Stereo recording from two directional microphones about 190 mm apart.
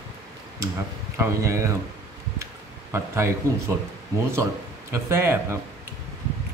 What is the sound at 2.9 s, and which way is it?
Speech, 15° right (ahead or behind).